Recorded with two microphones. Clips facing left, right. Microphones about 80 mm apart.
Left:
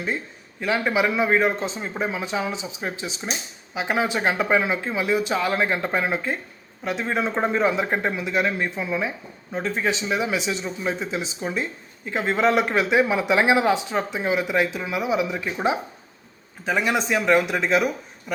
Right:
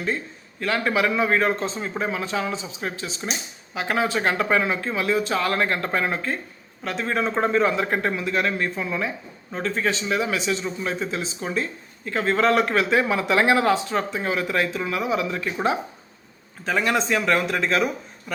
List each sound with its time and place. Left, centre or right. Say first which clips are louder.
0.6 s a man's voice: even; centre
16.6 s a man's voice: even; centre